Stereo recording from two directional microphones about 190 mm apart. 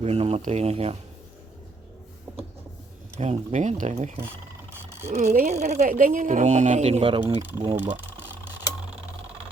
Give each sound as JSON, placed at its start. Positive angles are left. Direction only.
{"t": 0.0, "sound": "speech", "side_deg": -35}
{"t": 3.2, "sound": "speech", "side_deg": -35}
{"t": 4.9, "sound": "a sound", "side_deg": -15}
{"t": 5.1, "sound": "speech", "side_deg": -35}
{"t": 5.8, "sound": "speech", "side_deg": -45}